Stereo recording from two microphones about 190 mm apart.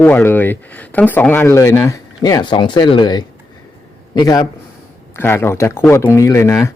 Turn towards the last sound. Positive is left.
turn(degrees=15)  # may be behind; listen again after turning